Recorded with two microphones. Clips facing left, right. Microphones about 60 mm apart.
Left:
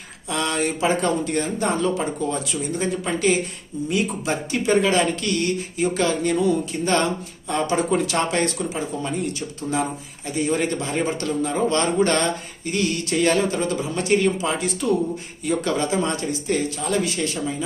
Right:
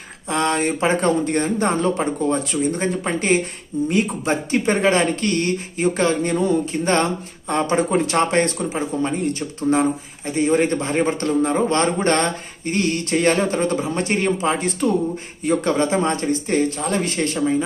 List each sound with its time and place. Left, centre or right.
0.3 s a man's voice: right